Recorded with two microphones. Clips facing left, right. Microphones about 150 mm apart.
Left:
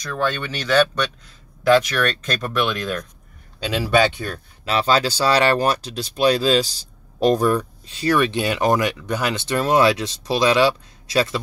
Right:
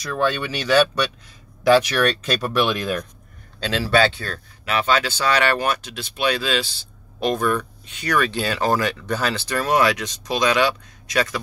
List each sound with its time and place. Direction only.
0.0 s speech: 5° right (ahead or behind)
3.5 s speech: 10° left (ahead or behind)
4.6 s speech: 30° left (ahead or behind)